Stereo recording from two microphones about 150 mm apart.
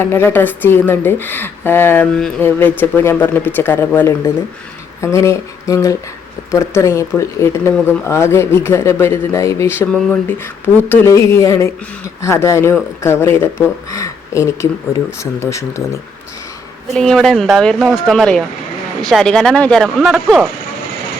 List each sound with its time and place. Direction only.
0.0 s speech: 15° left (ahead or behind)
16.9 s speech: centre (ahead or behind)